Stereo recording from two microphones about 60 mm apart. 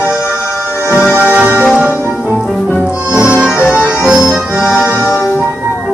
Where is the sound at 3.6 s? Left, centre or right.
Left.